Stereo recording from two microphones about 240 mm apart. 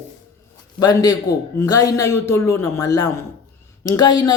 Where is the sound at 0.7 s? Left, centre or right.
Centre.